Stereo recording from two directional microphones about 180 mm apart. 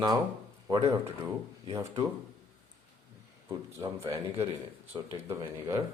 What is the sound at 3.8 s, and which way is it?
A woman's voice, 20° right (ahead or behind).